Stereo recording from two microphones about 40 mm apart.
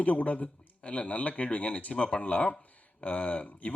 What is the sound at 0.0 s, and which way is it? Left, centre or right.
Speech, left.